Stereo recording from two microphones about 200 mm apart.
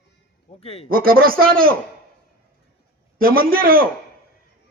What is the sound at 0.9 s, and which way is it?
Speech, 45° right (ahead or behind).